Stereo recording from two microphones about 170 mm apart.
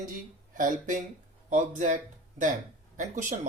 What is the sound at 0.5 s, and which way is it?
Speech, 50° right (ahead or behind).